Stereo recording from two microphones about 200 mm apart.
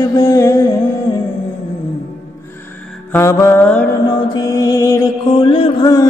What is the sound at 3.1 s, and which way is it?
Mantra, 15° left (ahead or behind).